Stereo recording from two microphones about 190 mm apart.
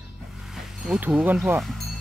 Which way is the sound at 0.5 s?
5° right (ahead or behind).